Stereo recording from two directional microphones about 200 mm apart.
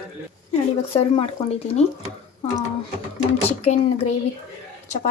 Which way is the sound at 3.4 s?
35° left (ahead or behind).